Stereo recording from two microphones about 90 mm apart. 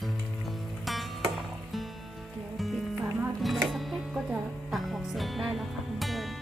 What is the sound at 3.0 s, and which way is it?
Music, 20° right (ahead or behind).